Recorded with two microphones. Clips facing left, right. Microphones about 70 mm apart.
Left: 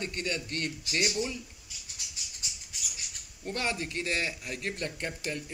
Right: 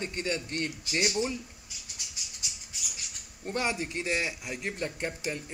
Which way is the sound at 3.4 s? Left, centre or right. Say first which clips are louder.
Right 2 dB; centre.